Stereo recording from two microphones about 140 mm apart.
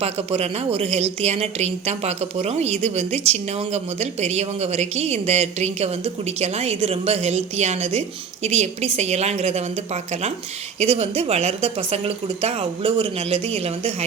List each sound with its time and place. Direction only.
0.0 s a woman's voice: 45° right (ahead or behind)